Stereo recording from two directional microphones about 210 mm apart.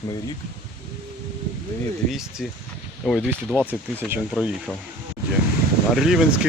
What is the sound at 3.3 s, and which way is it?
Speech, 10° right (ahead or behind).